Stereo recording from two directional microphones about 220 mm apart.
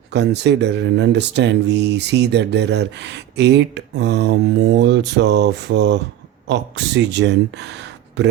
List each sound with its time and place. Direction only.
0.1 s speech: 50° right (ahead or behind)